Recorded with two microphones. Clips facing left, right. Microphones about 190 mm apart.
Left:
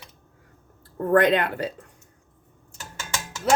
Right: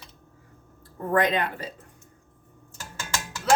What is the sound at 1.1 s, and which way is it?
Speech, 65° left (ahead or behind).